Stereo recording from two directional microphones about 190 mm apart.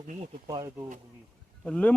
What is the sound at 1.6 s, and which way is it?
Speech, 5° left (ahead or behind).